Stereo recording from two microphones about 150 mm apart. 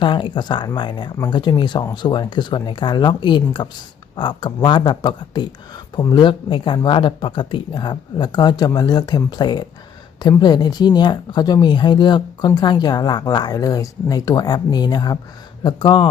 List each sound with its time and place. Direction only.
0.0 s speech: 30° left (ahead or behind)